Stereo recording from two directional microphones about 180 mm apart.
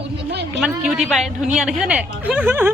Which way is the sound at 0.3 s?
65° right (ahead or behind).